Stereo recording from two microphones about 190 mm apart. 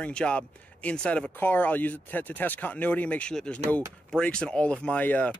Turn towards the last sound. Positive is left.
turn(degrees=10)  # may be behind; listen again after turning